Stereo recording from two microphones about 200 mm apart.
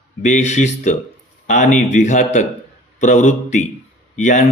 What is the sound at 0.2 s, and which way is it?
Speech, 35° left (ahead or behind).